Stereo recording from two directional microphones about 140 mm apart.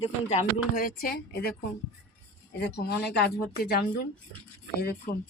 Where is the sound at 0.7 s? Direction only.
85° left.